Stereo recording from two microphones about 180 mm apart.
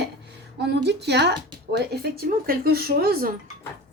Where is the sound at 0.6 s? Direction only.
70° right (ahead or behind).